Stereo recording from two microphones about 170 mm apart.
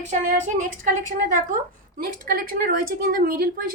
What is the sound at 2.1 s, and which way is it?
Speech, 55° right (ahead or behind).